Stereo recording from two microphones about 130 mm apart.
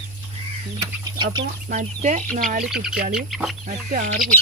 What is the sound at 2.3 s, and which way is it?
Speech, 80° right.